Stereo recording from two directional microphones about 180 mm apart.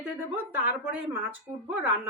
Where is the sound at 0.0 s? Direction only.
10° right (ahead or behind).